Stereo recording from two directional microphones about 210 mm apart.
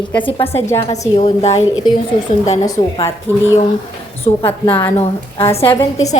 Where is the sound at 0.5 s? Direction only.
10° left (ahead or behind).